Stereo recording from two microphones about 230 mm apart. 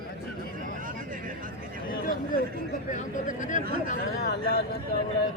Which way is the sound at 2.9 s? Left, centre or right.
Left.